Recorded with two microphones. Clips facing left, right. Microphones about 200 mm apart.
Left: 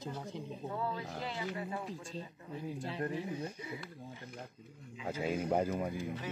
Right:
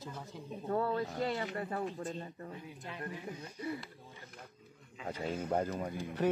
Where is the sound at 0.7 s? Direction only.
60° right (ahead or behind).